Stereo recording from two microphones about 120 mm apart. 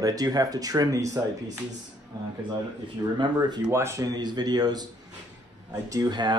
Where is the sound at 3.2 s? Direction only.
35° right (ahead or behind).